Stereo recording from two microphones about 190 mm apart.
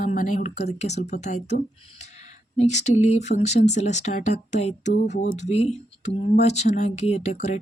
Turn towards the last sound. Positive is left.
turn(degrees=35)  # may be behind; listen again after turning